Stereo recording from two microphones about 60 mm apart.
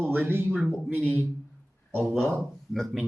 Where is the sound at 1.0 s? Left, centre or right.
Left.